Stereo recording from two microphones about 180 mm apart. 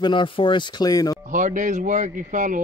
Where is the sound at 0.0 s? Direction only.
25° left (ahead or behind).